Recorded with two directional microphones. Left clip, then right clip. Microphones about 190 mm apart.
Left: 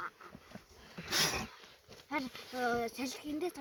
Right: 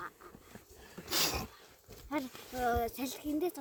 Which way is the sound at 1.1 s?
55° right (ahead or behind).